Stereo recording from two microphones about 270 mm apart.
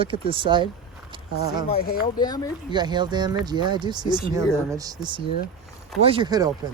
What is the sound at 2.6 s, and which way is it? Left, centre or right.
Speech, centre.